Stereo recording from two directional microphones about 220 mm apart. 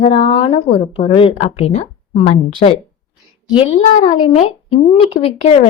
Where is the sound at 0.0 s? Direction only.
30° left (ahead or behind).